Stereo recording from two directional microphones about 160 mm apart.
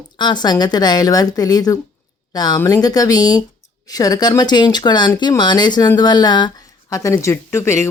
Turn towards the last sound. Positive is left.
turn(degrees=15)  # may be behind; listen again after turning